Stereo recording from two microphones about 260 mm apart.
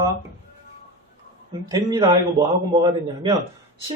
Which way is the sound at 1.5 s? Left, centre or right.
Centre.